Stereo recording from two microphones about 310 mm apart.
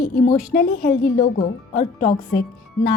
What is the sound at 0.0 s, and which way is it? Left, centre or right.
Speech, left.